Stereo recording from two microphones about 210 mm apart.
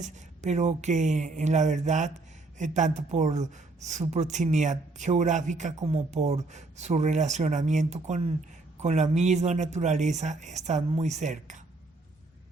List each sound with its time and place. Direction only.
0.0 s a woman's voice: 35° right (ahead or behind)